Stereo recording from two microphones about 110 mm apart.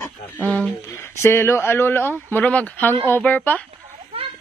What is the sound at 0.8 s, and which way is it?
Speech, 25° left (ahead or behind).